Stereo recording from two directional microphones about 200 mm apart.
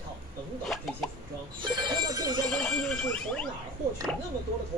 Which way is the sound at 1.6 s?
20° right (ahead or behind).